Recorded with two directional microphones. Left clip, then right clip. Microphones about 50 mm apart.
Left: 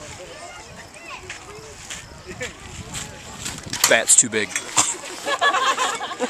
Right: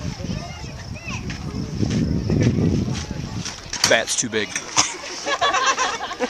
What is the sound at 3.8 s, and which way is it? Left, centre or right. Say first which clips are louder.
Speech: left 1 dB; centre.